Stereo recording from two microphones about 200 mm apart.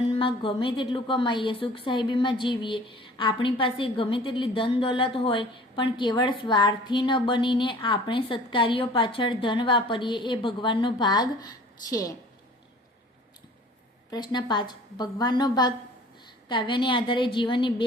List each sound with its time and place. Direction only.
0.1 s a woman's voice: 25° left (ahead or behind)
14.1 s a woman's voice: 20° left (ahead or behind)